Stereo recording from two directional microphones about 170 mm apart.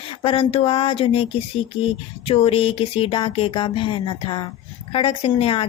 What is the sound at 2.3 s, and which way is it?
Speech, 35° left (ahead or behind).